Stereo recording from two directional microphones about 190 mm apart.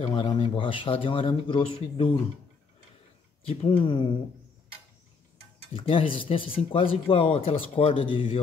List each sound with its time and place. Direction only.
0.0 s speech: 25° left (ahead or behind)
3.4 s speech: 30° left (ahead or behind)
5.7 s speech: 30° left (ahead or behind)